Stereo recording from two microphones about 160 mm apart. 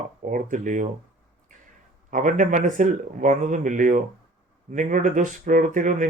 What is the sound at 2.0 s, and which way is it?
Speech, 55° right (ahead or behind).